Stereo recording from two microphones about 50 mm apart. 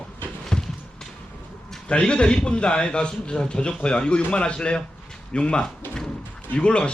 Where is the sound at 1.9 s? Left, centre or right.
Left.